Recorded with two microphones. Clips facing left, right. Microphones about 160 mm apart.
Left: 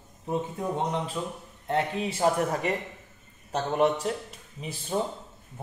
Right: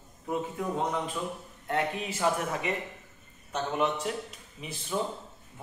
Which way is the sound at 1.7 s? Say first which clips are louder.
Left 3 dB; 30° left (ahead or behind).